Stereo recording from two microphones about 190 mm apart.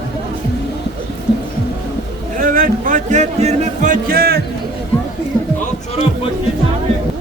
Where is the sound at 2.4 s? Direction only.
45° right (ahead or behind).